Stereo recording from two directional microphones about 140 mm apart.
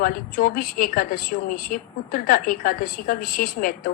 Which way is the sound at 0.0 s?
90° left.